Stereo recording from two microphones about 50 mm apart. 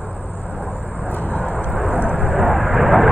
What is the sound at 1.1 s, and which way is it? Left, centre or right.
Vehicle, left.